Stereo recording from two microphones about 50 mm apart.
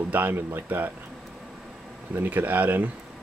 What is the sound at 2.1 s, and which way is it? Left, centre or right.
Speech, right.